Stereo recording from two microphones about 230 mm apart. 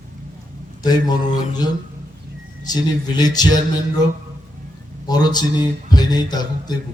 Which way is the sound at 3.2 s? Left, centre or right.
Centre.